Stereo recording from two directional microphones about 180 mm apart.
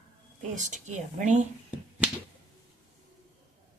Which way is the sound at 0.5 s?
40° right (ahead or behind).